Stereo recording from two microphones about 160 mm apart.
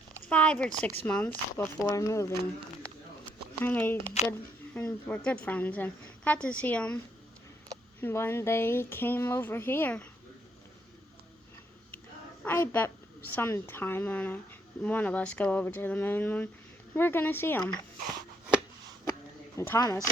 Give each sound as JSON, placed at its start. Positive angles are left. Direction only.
{"t": 0.3, "sound": "speech", "side_deg": 5}
{"t": 3.6, "sound": "speech", "side_deg": 10}
{"t": 8.0, "sound": "speech", "side_deg": 15}
{"t": 12.5, "sound": "speech", "side_deg": 10}
{"t": 19.5, "sound": "speech", "side_deg": 20}